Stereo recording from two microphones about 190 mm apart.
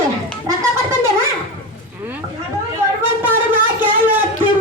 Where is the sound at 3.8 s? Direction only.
10° right (ahead or behind).